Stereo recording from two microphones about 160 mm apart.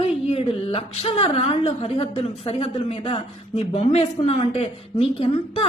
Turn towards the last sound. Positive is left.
turn(degrees=35)  # may be behind; listen again after turning